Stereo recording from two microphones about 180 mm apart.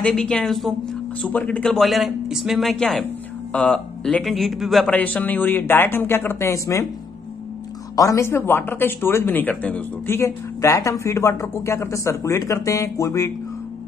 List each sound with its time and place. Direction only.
0.0 s a man's voice: 5° left (ahead or behind)
7.9 s speech: 20° left (ahead or behind)